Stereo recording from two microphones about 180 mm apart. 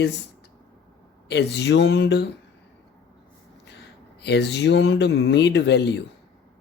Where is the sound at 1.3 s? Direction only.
70° left (ahead or behind).